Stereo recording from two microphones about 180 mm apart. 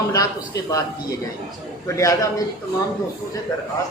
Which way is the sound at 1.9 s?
20° left (ahead or behind).